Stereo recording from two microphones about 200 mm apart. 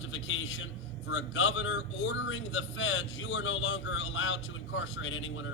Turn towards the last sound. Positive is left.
turn(degrees=75)  # may be behind; listen again after turning